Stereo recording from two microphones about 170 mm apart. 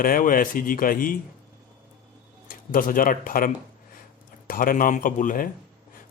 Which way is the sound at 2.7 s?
55° left (ahead or behind).